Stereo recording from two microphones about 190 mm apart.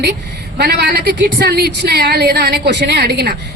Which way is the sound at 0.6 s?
55° right (ahead or behind).